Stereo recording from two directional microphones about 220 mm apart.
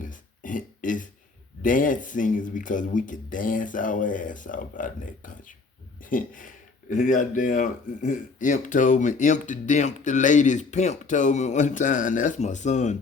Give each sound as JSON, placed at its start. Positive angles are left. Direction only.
{"t": 0.0, "sound": "burping", "side_deg": 35}
{"t": 1.6, "sound": "speech", "side_deg": 35}